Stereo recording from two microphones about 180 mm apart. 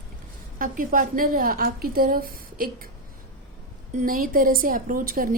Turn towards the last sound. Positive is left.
turn(degrees=-50)  # may be behind; listen again after turning